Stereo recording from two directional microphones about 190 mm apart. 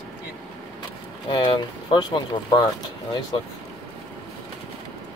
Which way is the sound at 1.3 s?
25° left (ahead or behind).